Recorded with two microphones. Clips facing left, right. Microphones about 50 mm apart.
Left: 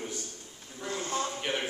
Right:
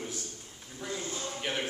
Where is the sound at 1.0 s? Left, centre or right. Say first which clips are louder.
Left 10 dB; left.